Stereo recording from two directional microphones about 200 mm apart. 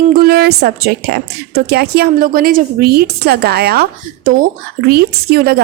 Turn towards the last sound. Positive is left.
turn(degrees=-50)  # may be behind; listen again after turning